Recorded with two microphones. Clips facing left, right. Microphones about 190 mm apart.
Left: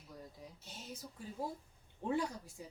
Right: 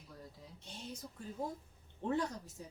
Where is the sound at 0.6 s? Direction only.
5° left (ahead or behind).